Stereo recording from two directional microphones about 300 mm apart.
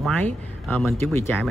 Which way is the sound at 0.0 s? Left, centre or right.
Centre.